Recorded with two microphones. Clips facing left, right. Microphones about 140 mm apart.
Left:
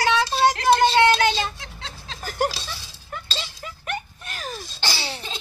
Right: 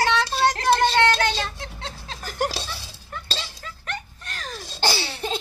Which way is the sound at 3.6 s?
10° left (ahead or behind).